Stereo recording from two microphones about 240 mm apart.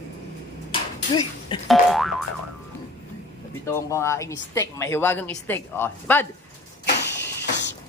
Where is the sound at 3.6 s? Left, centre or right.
Centre.